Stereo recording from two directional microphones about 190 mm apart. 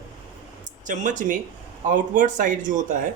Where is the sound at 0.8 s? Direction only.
40° right (ahead or behind).